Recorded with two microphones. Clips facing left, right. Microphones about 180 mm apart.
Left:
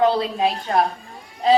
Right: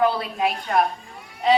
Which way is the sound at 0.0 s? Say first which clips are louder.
Left 3 dB; 25° left (ahead or behind).